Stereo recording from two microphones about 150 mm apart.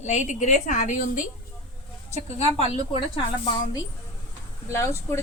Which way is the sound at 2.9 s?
35° left (ahead or behind).